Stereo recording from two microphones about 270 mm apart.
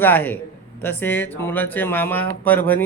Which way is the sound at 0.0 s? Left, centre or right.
Centre.